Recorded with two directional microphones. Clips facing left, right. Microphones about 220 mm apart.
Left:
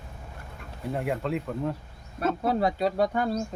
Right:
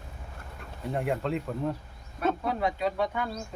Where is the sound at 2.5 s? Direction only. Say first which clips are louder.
Left 4 dB; 35° left (ahead or behind).